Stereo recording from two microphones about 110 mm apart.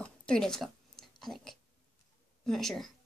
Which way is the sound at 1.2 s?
Centre (ahead or behind).